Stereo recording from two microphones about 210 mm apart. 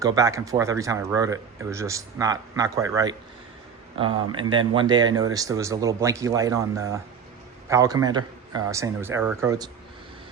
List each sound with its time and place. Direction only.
0.0 s speech: 15° right (ahead or behind)